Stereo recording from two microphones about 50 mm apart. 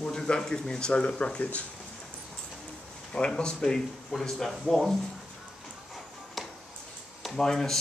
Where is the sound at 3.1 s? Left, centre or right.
Centre.